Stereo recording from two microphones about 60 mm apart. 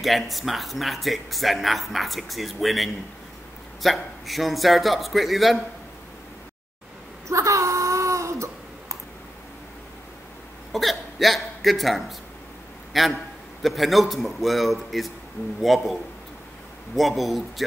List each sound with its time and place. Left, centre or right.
0.0 s speech: centre
7.2 s a sound: right
10.7 s speech: centre